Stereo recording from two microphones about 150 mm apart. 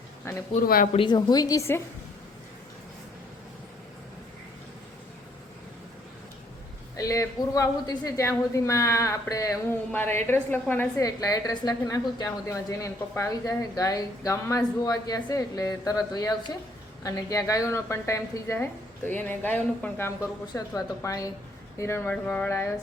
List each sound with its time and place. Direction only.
0.3 s a sound: 20° left (ahead or behind)
0.9 s a woman's voice: 30° left (ahead or behind)
6.9 s a woman's voice: 20° left (ahead or behind)
20.5 s a woman's voice: 25° left (ahead or behind)
22.1 s speech: 5° left (ahead or behind)
22.4 s a woman's voice: 15° left (ahead or behind)